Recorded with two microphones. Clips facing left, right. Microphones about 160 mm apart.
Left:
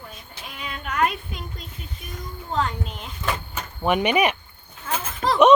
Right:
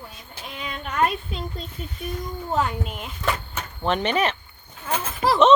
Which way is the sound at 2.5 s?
10° right (ahead or behind).